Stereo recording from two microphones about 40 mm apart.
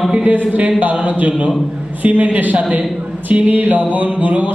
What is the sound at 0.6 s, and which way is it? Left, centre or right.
Speech, right.